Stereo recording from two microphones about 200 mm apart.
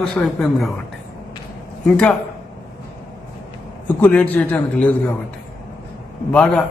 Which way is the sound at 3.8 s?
5° left (ahead or behind).